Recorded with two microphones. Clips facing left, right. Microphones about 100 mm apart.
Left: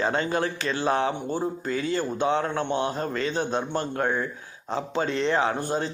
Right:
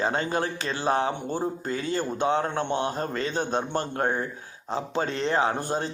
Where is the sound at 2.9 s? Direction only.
40° right (ahead or behind).